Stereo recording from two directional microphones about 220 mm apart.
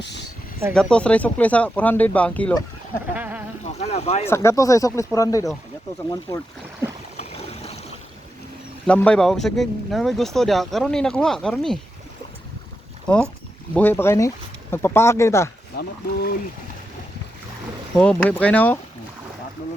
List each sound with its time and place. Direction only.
0.0 s a sound: 50° left (ahead or behind)
0.7 s speech: 5° left (ahead or behind)
3.2 s a sound: 5° right (ahead or behind)
3.6 s speech: 30° left (ahead or behind)
4.3 s speech: 15° left (ahead or behind)
7.2 s boat: 30° left (ahead or behind)
8.9 s speech: 5° left (ahead or behind)
13.7 s speech: 10° left (ahead or behind)
15.7 s speech: 45° left (ahead or behind)
17.9 s speech: 5° left (ahead or behind)